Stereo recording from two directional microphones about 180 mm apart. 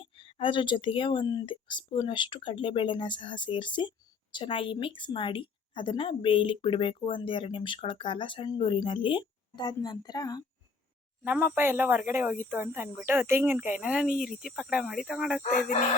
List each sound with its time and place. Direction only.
0.0 s speech: 30° left (ahead or behind)
11.2 s speech: 10° right (ahead or behind)